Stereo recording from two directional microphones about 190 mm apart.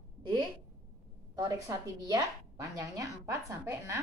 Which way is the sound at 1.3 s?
20° right (ahead or behind).